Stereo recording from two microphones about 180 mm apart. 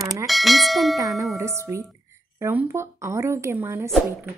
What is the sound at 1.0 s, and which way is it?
A woman's voice, 20° right (ahead or behind).